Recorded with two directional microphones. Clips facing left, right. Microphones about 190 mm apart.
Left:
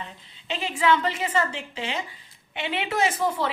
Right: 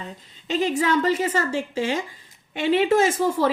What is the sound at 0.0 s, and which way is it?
A woman's voice, 40° right (ahead or behind).